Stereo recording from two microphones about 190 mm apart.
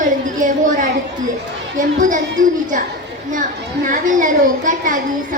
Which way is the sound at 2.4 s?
45° right (ahead or behind).